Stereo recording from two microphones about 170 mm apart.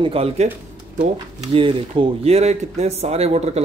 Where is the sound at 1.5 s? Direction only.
30° right (ahead or behind).